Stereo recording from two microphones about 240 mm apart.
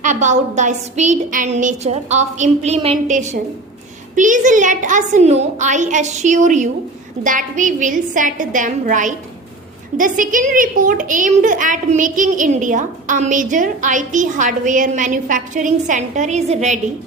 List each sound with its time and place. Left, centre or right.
0.0 s a woman's voice: right